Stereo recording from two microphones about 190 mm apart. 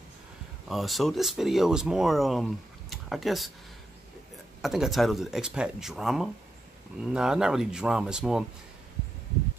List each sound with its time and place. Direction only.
0.7 s speech: centre (ahead or behind)
4.6 s speech: centre (ahead or behind)